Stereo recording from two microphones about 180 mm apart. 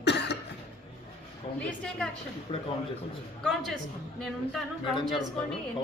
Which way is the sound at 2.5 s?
30° left (ahead or behind).